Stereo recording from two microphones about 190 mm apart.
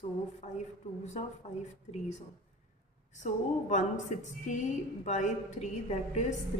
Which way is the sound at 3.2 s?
40° left (ahead or behind).